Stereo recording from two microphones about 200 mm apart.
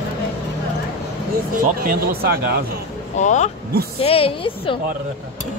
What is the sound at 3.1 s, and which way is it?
Speech, 35° left (ahead or behind).